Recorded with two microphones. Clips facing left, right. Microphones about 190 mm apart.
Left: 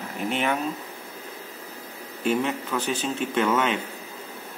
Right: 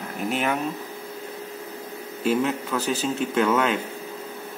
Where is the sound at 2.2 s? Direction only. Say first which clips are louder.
Right 2 dB; centre (ahead or behind).